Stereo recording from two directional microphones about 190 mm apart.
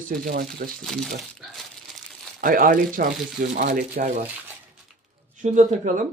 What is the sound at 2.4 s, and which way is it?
Speech, 45° right (ahead or behind).